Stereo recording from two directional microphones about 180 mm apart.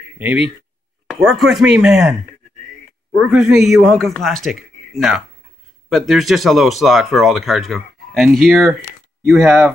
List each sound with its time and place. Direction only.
0.2 s speech: 5° right (ahead or behind)
3.2 s speech: centre (ahead or behind)